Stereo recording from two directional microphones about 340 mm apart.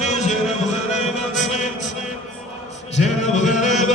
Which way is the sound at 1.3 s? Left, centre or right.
Left.